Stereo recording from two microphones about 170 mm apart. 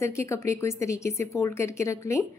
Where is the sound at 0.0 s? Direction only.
15° left (ahead or behind).